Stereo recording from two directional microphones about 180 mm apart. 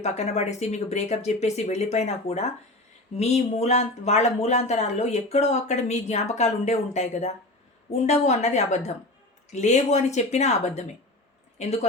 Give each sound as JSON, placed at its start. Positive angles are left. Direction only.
{"t": 0.0, "sound": "a woman's voice", "side_deg": 40}